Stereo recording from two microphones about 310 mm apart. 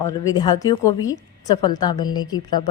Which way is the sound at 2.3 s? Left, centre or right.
Centre.